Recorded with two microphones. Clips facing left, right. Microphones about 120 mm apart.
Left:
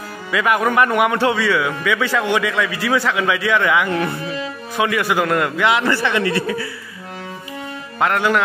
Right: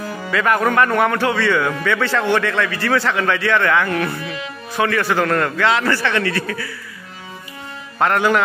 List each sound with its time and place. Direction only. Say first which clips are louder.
0.3 s a man's voice: even; 10° left (ahead or behind)
8.0 s a man's voice: right 1 dB; centre (ahead or behind)